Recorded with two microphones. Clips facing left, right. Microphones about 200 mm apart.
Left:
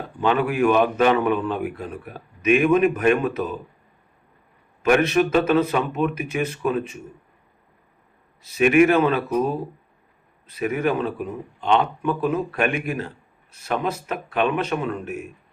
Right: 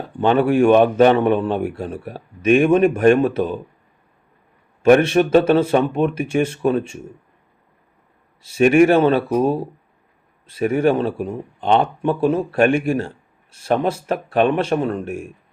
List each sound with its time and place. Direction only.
0.2 s a man's voice: 30° right (ahead or behind)
4.8 s a man's voice: 30° right (ahead or behind)
8.4 s a man's voice: 30° right (ahead or behind)